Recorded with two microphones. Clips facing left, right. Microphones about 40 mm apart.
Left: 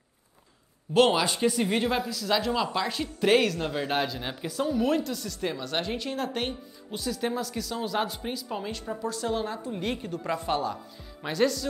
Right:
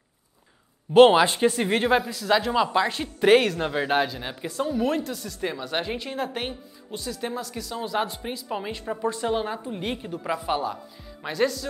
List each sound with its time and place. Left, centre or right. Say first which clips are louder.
0.9 s speech: right 7 dB; right; by 11.6 s centre